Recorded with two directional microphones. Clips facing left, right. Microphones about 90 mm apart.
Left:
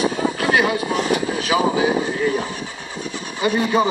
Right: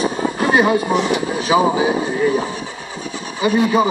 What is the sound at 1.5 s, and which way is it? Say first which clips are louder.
Speech: right 5 dB; 20° right (ahead or behind).